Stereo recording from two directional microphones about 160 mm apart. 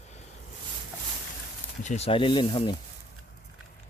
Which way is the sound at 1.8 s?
45° left (ahead or behind).